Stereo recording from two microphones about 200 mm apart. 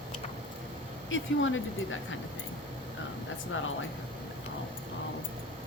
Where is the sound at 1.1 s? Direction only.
75° left (ahead or behind).